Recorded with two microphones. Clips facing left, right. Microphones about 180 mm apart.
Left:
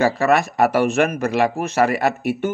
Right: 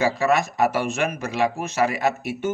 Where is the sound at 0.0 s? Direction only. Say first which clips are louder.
Left 3 dB; 60° left (ahead or behind).